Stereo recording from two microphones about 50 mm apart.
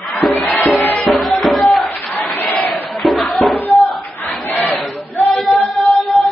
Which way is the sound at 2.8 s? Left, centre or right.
Centre.